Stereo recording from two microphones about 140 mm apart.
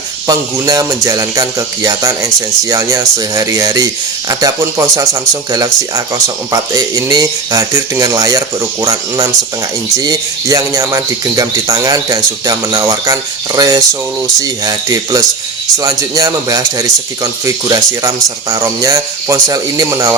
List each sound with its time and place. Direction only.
0.3 s speech: 25° right (ahead or behind)